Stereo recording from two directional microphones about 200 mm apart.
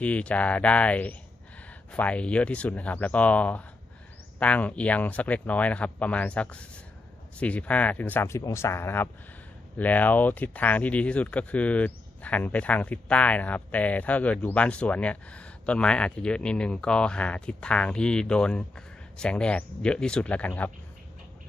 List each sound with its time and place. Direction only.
0.0 s speech: 5° left (ahead or behind)